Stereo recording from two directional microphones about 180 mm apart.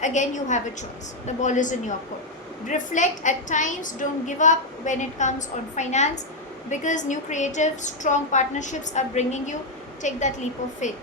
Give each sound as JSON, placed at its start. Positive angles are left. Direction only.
{"t": 0.0, "sound": "a woman's voice", "side_deg": 40}